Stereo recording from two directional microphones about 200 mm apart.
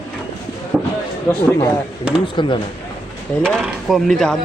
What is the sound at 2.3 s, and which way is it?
Speech, 25° left (ahead or behind).